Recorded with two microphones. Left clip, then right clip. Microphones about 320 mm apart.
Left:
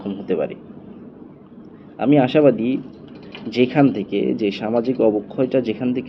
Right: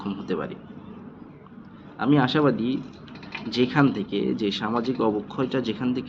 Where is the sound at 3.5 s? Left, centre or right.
Right.